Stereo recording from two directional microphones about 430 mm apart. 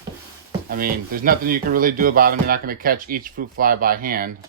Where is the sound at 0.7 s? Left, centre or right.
Centre.